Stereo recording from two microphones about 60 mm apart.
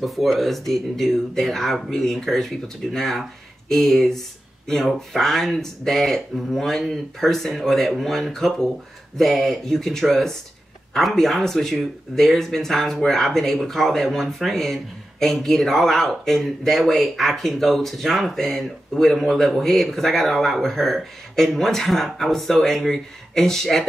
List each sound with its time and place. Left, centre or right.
0.0 s speech: centre